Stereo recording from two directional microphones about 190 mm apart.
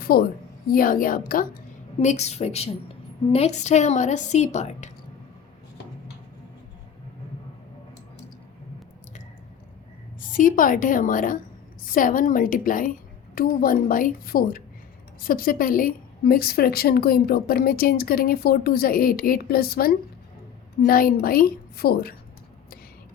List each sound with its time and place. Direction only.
0.0 s a woman's voice: 50° left (ahead or behind); by 4.9 s 35° left (ahead or behind)
10.2 s a woman's voice: 45° left (ahead or behind)